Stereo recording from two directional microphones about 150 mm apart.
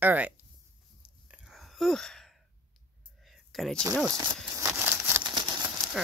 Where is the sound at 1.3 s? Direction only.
5° right (ahead or behind).